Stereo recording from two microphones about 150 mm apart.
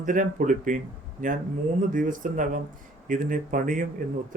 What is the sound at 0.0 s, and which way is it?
Speech, 60° right (ahead or behind).